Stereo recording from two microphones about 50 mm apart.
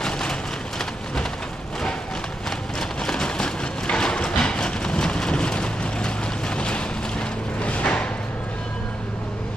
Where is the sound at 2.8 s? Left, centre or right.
Centre.